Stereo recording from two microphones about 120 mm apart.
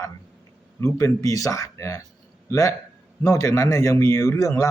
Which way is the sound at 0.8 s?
25° left (ahead or behind).